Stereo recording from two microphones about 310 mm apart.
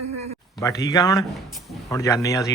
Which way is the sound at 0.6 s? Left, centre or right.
Centre.